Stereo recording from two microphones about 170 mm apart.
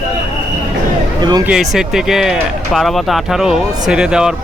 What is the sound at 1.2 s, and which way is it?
Speech, 25° right (ahead or behind).